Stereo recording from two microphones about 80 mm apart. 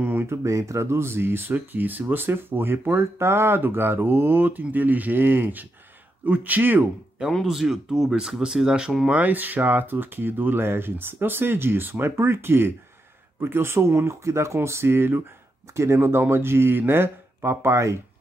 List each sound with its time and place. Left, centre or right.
0.0 s a sound: right
0.3 s speech: right
7.4 s speech: centre
9.0 s speech: centre; by 18.0 s right